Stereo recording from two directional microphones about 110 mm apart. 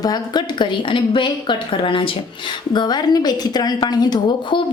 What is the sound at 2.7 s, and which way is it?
A woman's voice, 40° left (ahead or behind).